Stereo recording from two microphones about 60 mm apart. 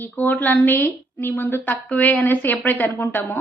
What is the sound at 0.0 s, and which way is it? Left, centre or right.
A woman's voice, left.